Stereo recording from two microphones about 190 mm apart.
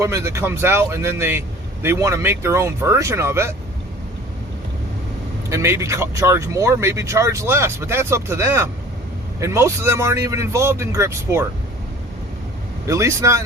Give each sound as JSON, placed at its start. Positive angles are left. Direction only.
{"t": 0.0, "sound": "a man's voice", "side_deg": -15}
{"t": 5.5, "sound": "a man's voice", "side_deg": -15}
{"t": 12.9, "sound": "a man's voice", "side_deg": -15}